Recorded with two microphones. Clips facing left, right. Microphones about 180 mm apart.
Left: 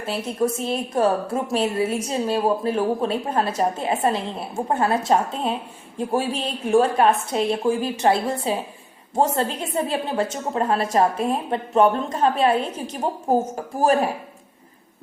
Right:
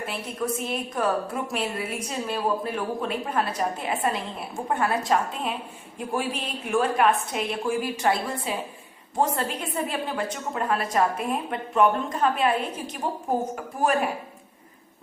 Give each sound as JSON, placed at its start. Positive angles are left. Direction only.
{"t": 0.0, "sound": "a woman's voice", "side_deg": 30}
{"t": 13.7, "sound": "a woman's voice", "side_deg": 30}